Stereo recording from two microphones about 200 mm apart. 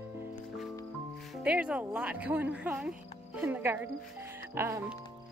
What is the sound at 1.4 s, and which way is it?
A woman's voice, 5° right (ahead or behind).